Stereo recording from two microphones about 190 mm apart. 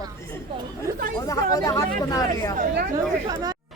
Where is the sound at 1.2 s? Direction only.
20° left (ahead or behind).